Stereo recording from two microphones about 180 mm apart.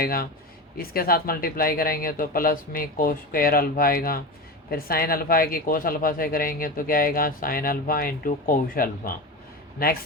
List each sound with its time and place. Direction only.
0.0 s speech: 55° left (ahead or behind)